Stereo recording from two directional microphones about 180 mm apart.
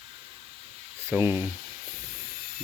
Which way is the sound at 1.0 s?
10° right (ahead or behind).